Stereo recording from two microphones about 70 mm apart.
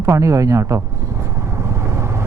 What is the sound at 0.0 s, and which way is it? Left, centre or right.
Speech, right.